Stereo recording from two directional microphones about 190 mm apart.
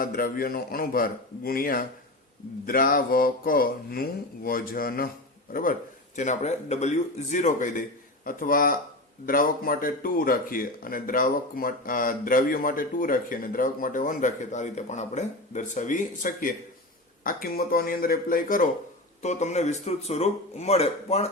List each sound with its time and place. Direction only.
0.0 s a man's voice: 50° left (ahead or behind); by 21.2 s 35° left (ahead or behind)